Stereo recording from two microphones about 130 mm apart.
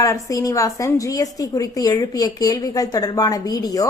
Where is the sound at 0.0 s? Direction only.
25° left (ahead or behind).